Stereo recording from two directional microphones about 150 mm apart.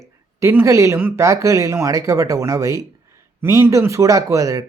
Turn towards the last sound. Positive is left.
turn(degrees=-20)  # may be behind; listen again after turning